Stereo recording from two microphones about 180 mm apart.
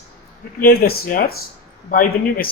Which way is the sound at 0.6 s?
55° left (ahead or behind).